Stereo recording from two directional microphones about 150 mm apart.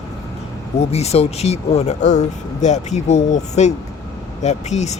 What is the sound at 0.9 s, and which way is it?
Speech, 45° left (ahead or behind).